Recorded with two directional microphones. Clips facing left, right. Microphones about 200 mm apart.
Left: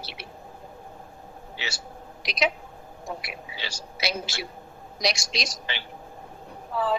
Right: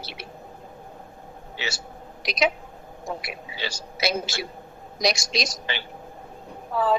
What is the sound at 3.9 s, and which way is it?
A woman's voice, 45° right (ahead or behind).